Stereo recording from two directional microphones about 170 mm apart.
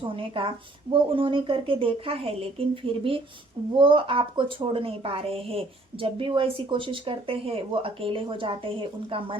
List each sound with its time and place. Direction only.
0.2 s a woman's voice: 35° right (ahead or behind)